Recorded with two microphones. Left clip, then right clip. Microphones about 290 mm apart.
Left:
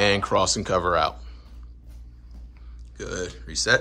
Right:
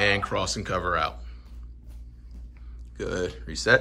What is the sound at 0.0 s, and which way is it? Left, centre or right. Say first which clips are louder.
Speech: left 4 dB; centre.